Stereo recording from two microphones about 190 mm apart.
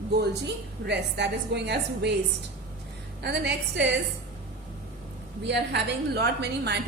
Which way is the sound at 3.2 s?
65° right (ahead or behind).